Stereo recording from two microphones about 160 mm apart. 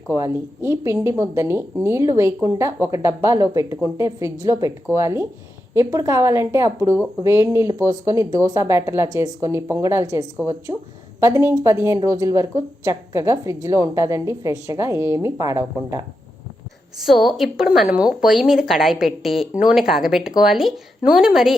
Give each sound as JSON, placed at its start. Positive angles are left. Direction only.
{"t": 0.1, "sound": "a woman's voice", "side_deg": -15}
{"t": 17.0, "sound": "a woman's voice", "side_deg": 0}